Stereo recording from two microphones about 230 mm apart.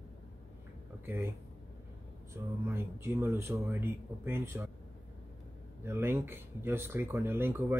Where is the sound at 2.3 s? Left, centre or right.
Centre.